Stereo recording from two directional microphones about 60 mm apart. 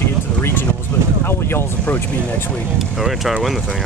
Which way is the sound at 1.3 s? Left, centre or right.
Left.